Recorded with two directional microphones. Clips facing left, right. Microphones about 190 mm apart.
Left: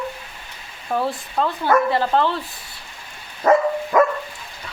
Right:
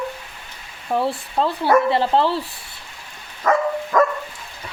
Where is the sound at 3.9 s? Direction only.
10° left (ahead or behind).